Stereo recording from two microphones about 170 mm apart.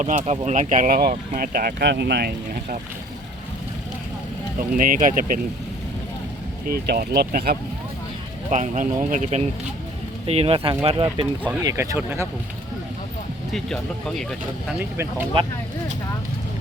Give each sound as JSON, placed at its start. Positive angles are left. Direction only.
{"t": 0.0, "sound": "speech", "side_deg": -45}
{"t": 4.7, "sound": "speech", "side_deg": -55}
{"t": 6.8, "sound": "speech", "side_deg": -65}
{"t": 8.4, "sound": "speech", "side_deg": -45}
{"t": 11.6, "sound": "speech", "side_deg": -20}
{"t": 13.5, "sound": "speech", "side_deg": 5}
{"t": 14.8, "sound": "speech", "side_deg": -10}